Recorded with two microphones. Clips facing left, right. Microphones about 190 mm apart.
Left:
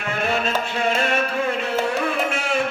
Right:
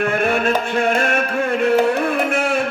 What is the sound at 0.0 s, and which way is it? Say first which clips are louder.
Music: right 6 dB; 55° right (ahead or behind).